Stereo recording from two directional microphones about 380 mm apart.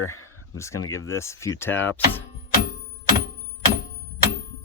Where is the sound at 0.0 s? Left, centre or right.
Left.